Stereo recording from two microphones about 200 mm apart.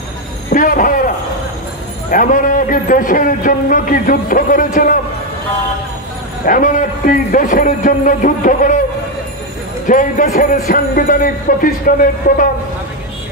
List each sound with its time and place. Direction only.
0.5 s a sound: 40° left (ahead or behind)
2.0 s a man's voice: 40° left (ahead or behind)
6.4 s a man's voice: 40° left (ahead or behind)
9.8 s a man's voice: 40° left (ahead or behind)